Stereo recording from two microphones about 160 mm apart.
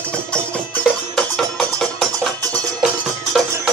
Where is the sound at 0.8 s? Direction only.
5° left (ahead or behind).